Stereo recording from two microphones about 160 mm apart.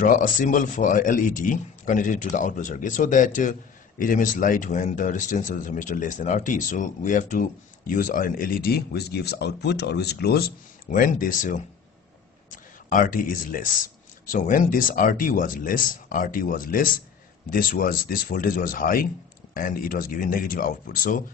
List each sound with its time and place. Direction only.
0.0 s speech: 55° left (ahead or behind)